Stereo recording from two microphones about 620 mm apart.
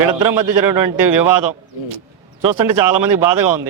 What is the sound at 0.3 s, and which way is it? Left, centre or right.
Speech, right.